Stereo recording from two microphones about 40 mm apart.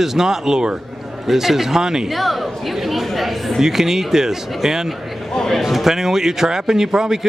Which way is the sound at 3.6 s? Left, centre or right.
Centre.